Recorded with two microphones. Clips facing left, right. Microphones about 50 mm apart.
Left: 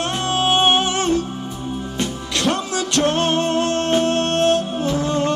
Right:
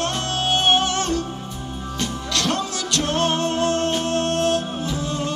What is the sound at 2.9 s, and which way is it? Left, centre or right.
Music, left.